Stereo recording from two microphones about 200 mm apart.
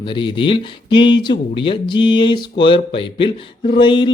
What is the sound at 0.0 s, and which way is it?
Speech, 25° left (ahead or behind).